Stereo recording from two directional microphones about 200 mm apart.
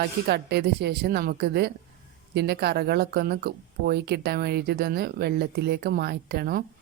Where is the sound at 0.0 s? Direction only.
55° right (ahead or behind).